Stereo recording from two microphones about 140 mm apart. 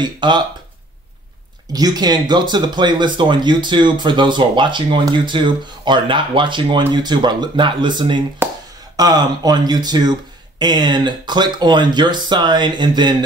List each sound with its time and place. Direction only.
0.0 s speech: 35° right (ahead or behind)
1.7 s speech: 30° right (ahead or behind)